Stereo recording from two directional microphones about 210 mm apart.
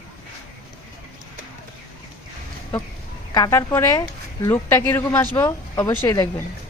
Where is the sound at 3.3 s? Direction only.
15° left (ahead or behind).